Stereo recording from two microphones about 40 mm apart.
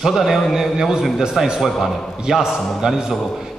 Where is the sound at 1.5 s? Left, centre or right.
Centre.